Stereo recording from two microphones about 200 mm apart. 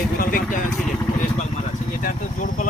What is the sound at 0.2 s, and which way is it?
Speech, 45° left (ahead or behind).